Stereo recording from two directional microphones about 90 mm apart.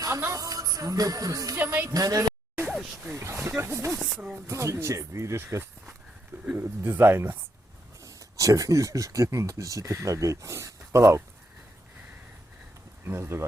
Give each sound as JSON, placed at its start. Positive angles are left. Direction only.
{"t": 0.0, "sound": "a woman's voice", "side_deg": -30}
{"t": 1.5, "sound": "speech", "side_deg": -20}
{"t": 1.9, "sound": "a woman's voice", "side_deg": -40}
{"t": 2.7, "sound": "speech", "side_deg": 0}
{"t": 3.1, "sound": "speech", "side_deg": -30}
{"t": 8.0, "sound": "speech", "side_deg": -40}
{"t": 13.1, "sound": "speech", "side_deg": -30}